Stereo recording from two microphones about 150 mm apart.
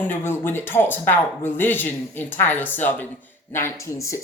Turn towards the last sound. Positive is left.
turn(degrees=20)  # may be behind; listen again after turning